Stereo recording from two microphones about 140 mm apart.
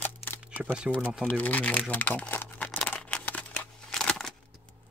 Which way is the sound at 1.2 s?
10° left (ahead or behind).